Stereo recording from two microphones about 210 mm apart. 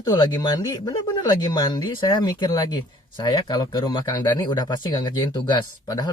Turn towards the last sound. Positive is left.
turn(degrees=20)  # may be behind; listen again after turning